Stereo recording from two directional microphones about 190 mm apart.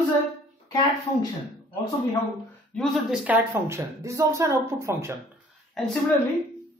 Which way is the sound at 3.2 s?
15° right (ahead or behind).